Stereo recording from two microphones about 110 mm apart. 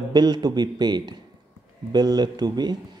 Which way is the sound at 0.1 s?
40° right (ahead or behind).